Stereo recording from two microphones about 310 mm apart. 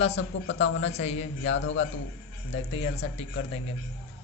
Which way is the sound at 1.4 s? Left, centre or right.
Left.